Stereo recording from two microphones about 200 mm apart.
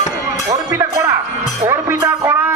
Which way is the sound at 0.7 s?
15° right (ahead or behind).